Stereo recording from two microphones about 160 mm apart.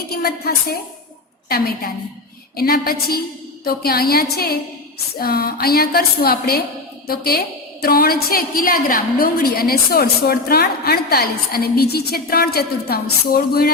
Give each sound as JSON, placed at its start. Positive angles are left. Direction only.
{"t": 0.1, "sound": "a woman's voice", "side_deg": 70}